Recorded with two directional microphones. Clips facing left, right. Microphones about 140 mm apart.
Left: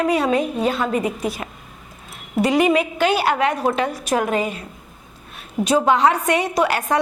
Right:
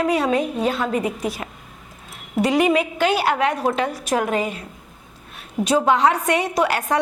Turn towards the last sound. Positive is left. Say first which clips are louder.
# left 1 dB
turn(degrees=15)  # may be behind; listen again after turning